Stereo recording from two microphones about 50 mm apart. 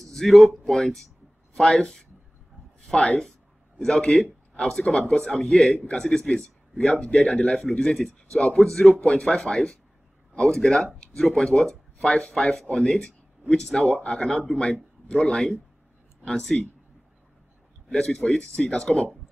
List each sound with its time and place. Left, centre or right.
0.0 s a man's voice: centre; by 12.5 s left
12.7 s a man's voice: centre
17.9 s a man's voice: centre